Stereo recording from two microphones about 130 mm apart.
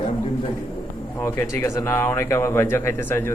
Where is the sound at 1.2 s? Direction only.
20° left (ahead or behind).